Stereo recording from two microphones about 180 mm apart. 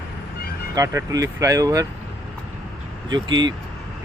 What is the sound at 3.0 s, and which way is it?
Speech, 25° right (ahead or behind).